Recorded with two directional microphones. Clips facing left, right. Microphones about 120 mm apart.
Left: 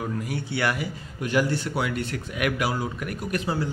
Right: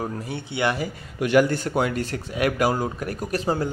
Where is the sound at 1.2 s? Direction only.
65° right (ahead or behind).